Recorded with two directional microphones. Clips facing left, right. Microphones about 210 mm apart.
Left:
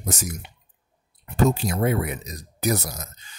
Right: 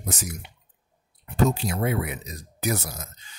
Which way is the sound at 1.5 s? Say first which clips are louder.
Left 3 dB; 45° left (ahead or behind).